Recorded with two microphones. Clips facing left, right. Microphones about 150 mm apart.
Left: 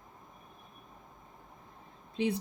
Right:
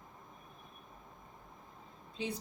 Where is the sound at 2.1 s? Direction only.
60° left (ahead or behind).